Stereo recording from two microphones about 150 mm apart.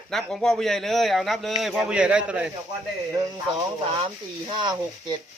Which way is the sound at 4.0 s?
35° right (ahead or behind).